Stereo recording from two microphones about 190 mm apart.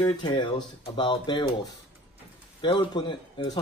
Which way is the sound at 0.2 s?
25° left (ahead or behind).